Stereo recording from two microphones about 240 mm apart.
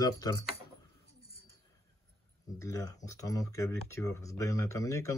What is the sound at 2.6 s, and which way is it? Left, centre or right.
Speech, centre.